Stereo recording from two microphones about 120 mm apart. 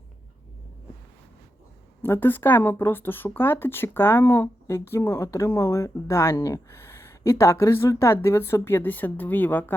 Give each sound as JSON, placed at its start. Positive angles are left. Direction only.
{"t": 2.0, "sound": "speech", "side_deg": 20}